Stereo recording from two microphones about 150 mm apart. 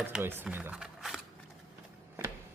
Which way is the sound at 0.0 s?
15° right (ahead or behind).